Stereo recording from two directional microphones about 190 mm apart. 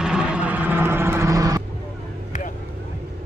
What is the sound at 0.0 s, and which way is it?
Vehicle, 5° right (ahead or behind).